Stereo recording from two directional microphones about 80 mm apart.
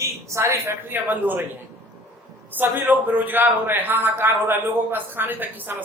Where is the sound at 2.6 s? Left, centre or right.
Right.